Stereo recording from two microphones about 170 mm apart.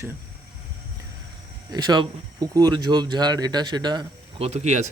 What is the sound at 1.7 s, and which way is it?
Speech, 25° right (ahead or behind).